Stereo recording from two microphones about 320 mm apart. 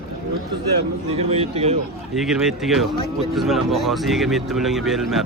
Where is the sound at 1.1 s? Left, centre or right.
Centre.